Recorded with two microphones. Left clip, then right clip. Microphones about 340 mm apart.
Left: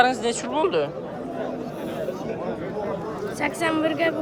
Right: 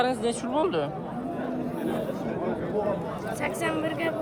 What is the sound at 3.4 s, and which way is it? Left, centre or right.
Speech, left.